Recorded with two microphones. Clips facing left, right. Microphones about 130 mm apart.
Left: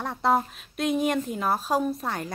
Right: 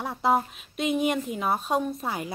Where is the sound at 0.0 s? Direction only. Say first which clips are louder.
Even; centre (ahead or behind).